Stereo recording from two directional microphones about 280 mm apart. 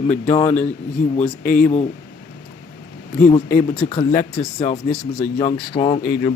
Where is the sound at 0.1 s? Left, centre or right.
Left.